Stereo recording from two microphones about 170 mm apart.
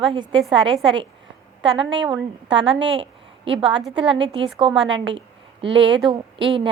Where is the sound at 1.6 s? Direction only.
30° right (ahead or behind).